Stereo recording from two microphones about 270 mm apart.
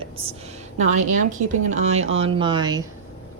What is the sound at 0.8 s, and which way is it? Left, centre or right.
A woman's voice, right.